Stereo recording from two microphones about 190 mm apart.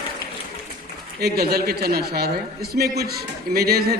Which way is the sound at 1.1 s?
55° right (ahead or behind).